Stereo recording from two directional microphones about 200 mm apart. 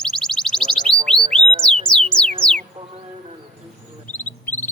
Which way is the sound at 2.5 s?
Centre (ahead or behind).